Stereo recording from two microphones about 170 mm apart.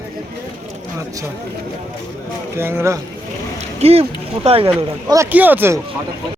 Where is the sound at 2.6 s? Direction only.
15° right (ahead or behind).